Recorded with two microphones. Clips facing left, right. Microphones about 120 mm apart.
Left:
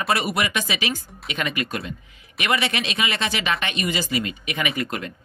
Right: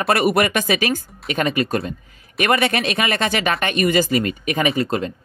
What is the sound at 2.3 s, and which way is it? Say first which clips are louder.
Speech: right 6 dB; 50° right (ahead or behind).